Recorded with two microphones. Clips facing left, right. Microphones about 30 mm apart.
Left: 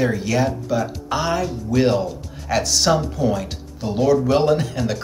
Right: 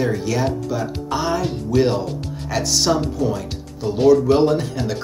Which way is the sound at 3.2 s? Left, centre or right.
Centre.